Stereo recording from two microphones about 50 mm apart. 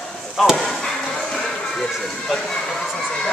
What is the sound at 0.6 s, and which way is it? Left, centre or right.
Chop, centre.